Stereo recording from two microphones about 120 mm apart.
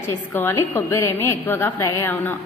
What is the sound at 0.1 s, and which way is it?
A woman's voice, 20° left (ahead or behind).